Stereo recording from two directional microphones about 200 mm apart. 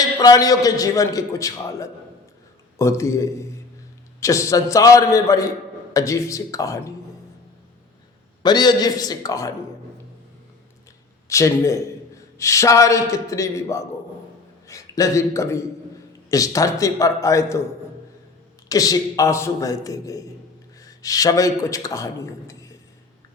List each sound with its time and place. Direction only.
0.2 s a man's voice: 20° left (ahead or behind)
8.4 s a man's voice: 20° left (ahead or behind)
11.3 s a man's voice: 15° left (ahead or behind)
18.7 s a man's voice: 15° left (ahead or behind)